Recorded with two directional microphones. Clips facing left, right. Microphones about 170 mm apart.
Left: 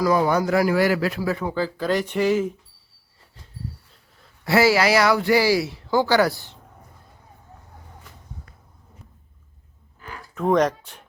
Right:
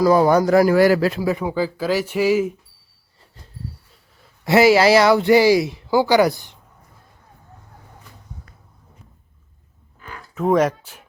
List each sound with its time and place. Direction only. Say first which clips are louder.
0.0 s a man's voice: right 5 dB; 35° right (ahead or behind)
1.2 s speech: right 3 dB; 15° right (ahead or behind)
4.4 s speech: right 5 dB; 20° right (ahead or behind)
10.3 s speech: right 2 dB; 5° right (ahead or behind)